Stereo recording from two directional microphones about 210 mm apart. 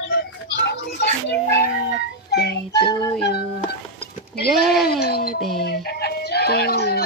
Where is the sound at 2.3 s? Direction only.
50° left (ahead or behind).